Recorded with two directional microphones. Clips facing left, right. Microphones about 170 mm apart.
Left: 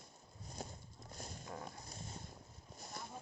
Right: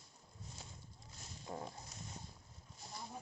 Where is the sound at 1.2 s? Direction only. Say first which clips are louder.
Left 6 dB; 50° left (ahead or behind).